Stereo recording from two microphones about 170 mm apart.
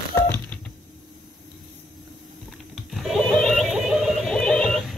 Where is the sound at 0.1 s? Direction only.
15° left (ahead or behind).